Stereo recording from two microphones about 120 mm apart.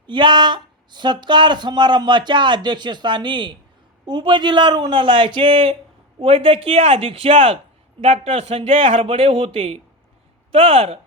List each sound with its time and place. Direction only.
0.1 s speech: 40° right (ahead or behind)